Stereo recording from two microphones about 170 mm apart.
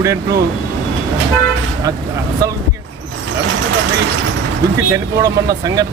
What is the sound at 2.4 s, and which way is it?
Speech, 20° right (ahead or behind).